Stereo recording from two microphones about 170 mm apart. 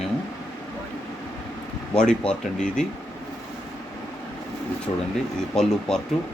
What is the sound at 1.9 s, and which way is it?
Speech, 5° left (ahead or behind).